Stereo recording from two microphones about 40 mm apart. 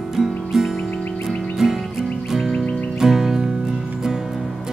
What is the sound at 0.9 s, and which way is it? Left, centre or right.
Music, left.